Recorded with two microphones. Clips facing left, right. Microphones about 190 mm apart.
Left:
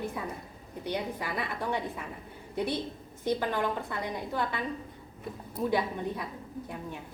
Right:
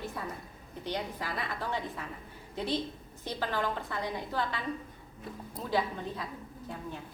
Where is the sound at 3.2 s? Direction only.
15° left (ahead or behind).